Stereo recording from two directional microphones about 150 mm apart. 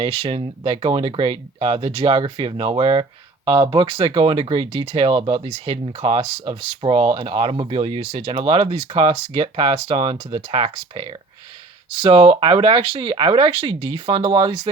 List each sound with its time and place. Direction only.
0.0 s speech: 40° right (ahead or behind)